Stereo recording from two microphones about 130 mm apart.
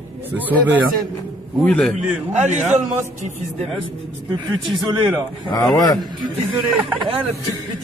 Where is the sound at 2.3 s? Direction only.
60° right (ahead or behind).